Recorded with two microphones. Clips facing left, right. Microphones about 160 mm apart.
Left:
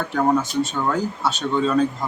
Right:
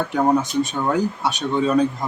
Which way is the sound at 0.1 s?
15° right (ahead or behind).